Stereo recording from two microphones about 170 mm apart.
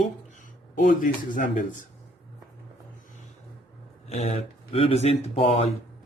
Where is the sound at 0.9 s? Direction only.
50° left (ahead or behind).